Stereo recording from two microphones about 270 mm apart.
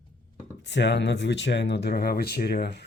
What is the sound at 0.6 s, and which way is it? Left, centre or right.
Speech, left.